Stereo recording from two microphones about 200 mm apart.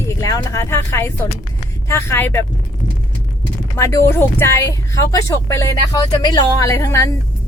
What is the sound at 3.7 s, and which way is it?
A woman's voice, 15° left (ahead or behind).